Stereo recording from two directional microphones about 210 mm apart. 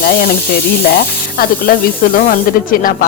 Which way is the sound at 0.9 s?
45° left (ahead or behind).